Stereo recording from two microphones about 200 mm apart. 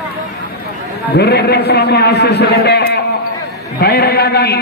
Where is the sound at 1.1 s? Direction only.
55° left (ahead or behind).